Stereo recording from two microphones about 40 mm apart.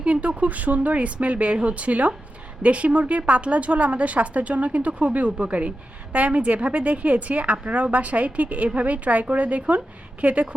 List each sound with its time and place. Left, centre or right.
0.0 s a woman's voice: right